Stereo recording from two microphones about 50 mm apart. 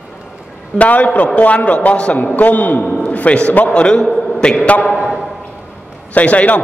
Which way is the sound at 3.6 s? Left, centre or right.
Left.